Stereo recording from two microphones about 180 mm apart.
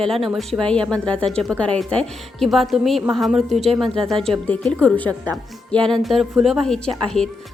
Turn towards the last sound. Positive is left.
turn(degrees=5)  # may be behind; listen again after turning